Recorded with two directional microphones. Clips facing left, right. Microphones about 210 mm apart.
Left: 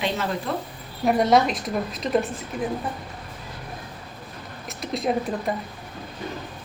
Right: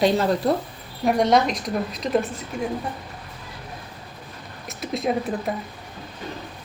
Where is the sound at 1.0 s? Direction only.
Centre (ahead or behind).